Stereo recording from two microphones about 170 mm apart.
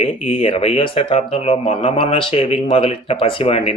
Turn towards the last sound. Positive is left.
turn(degrees=35)  # may be behind; listen again after turning